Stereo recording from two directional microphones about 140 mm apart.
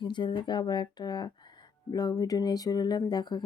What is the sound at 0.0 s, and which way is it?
Speech, 35° left (ahead or behind).